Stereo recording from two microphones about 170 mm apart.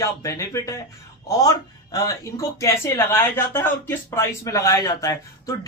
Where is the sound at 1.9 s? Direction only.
20° left (ahead or behind).